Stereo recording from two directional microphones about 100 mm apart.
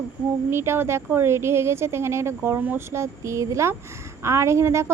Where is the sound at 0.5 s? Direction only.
25° right (ahead or behind).